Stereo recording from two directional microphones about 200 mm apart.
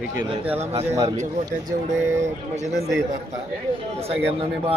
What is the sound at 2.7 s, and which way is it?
Speech, 15° right (ahead or behind).